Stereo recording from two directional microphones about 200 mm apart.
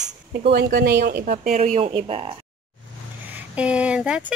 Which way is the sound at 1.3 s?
40° right (ahead or behind).